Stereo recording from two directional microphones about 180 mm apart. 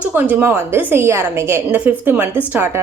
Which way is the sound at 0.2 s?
10° right (ahead or behind).